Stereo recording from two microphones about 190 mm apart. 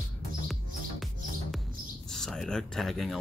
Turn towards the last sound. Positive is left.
turn(degrees=0)  # may be behind; listen again after turning